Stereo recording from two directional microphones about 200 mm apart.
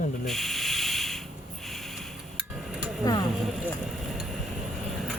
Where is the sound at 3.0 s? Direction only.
20° left (ahead or behind).